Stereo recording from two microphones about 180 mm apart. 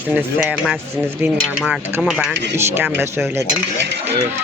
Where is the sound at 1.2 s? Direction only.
Centre (ahead or behind).